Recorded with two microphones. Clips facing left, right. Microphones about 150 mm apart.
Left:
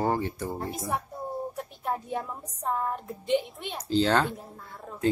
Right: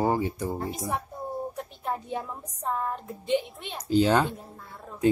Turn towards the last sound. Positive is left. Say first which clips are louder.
# right 3 dB
turn(degrees=-15)  # may be behind; listen again after turning